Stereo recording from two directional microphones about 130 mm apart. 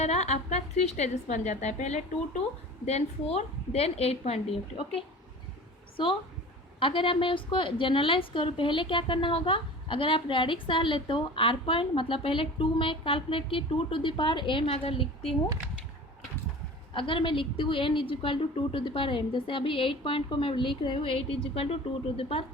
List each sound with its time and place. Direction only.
0.0 s a woman's voice: 55° left (ahead or behind)
6.7 s a woman's voice: 40° left (ahead or behind)
16.9 s a woman's voice: 40° left (ahead or behind)